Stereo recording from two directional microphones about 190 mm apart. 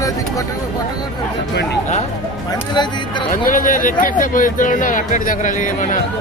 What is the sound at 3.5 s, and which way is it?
Speech, 45° left (ahead or behind).